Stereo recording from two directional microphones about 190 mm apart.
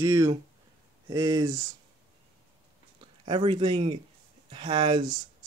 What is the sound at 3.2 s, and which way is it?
Speech, 25° right (ahead or behind).